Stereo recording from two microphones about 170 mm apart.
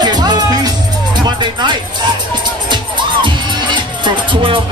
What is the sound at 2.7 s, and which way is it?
Music, 25° right (ahead or behind).